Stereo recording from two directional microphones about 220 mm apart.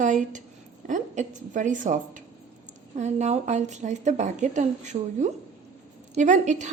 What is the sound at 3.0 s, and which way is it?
Speech, 30° right (ahead or behind).